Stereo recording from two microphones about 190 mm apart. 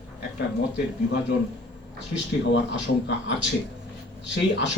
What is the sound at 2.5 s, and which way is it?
Speech, 75° left (ahead or behind).